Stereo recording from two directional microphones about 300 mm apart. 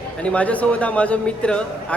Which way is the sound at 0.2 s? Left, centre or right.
Centre.